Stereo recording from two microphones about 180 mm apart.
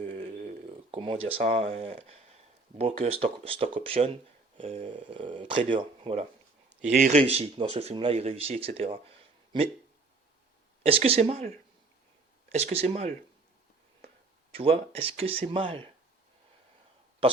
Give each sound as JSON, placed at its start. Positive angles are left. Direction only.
{"t": 0.0, "sound": "a sound", "side_deg": -45}
{"t": 2.7, "sound": "speech", "side_deg": -35}
{"t": 6.9, "sound": "speech", "side_deg": -45}
{"t": 10.8, "sound": "speech", "side_deg": -30}
{"t": 12.5, "sound": "speech", "side_deg": -35}
{"t": 14.6, "sound": "speech", "side_deg": -30}